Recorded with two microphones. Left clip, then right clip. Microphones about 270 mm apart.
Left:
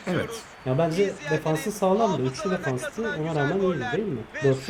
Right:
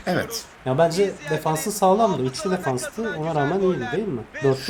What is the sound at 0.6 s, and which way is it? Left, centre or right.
Speech, right.